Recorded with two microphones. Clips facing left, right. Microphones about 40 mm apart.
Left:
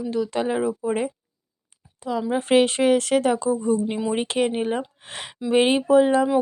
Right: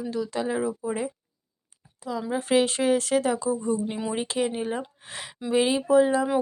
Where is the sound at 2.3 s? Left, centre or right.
Left.